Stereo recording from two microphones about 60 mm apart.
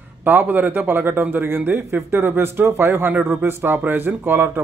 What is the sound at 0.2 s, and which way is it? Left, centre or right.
A man's voice, right.